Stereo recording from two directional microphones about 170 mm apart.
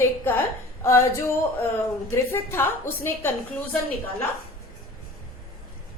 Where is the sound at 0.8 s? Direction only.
15° left (ahead or behind).